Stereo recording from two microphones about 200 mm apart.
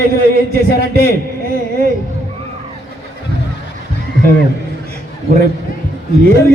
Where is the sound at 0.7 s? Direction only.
55° left (ahead or behind).